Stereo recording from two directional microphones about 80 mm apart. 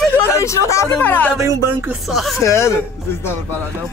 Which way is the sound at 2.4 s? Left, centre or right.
Left.